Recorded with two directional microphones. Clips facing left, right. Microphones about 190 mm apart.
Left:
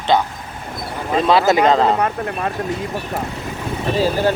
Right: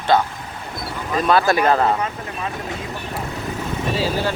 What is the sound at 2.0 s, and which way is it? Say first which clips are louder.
Speech: left 6 dB; 55° left (ahead or behind).